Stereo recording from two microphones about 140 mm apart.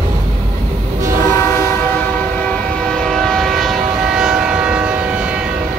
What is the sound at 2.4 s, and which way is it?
Train, 5° left (ahead or behind).